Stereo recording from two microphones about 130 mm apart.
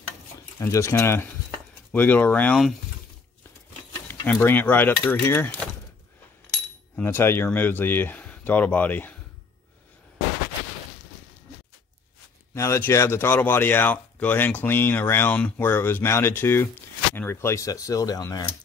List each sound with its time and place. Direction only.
0.6 s speech: 20° left (ahead or behind)
4.1 s speech: 15° left (ahead or behind)
12.5 s speech: 20° left (ahead or behind)